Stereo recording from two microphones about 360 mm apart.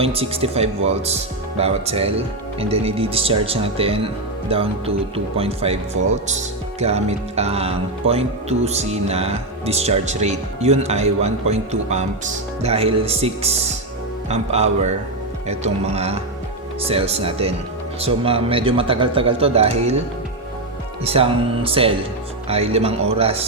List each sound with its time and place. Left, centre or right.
0.0 s speech: centre
21.0 s speech: centre